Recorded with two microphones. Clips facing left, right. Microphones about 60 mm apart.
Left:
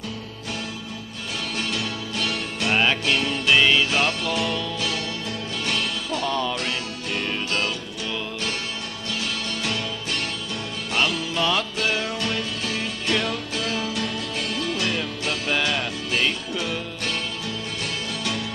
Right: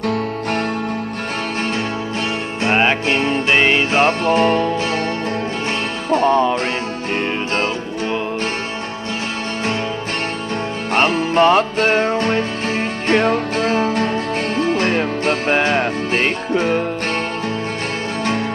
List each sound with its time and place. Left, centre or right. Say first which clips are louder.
0.0 s music: right 14 dB; right
2.6 s music: right 6 dB; right
6.0 s music: right 14 dB; right
10.9 s music: right 8 dB; right